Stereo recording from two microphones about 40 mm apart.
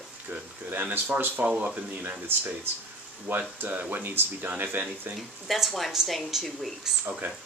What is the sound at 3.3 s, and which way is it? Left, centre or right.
Speech, right.